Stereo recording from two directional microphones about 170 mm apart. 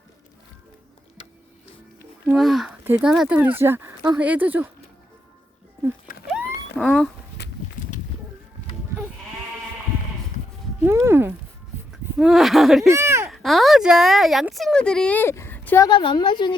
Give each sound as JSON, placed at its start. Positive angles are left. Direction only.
{"t": 2.3, "sound": "speech", "side_deg": 0}
{"t": 6.2, "sound": "a sound", "side_deg": -5}
{"t": 6.8, "sound": "speech", "side_deg": 0}
{"t": 10.8, "sound": "a sound", "side_deg": -15}
{"t": 12.9, "sound": "speech", "side_deg": -15}
{"t": 13.3, "sound": "speech", "side_deg": 0}
{"t": 15.9, "sound": "a woman's voice", "side_deg": 30}